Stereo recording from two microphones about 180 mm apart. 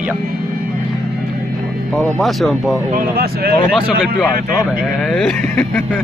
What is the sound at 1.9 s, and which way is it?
Speech, centre (ahead or behind).